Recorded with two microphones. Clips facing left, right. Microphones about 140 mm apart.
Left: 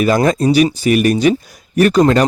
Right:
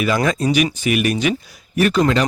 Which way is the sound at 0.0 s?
40° left (ahead or behind).